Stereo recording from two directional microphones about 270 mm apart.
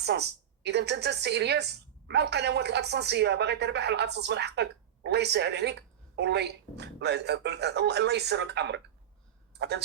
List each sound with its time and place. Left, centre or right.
0.0 s a woman's voice: right